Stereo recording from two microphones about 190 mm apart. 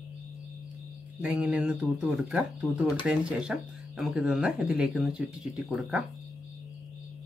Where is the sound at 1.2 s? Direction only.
5° right (ahead or behind).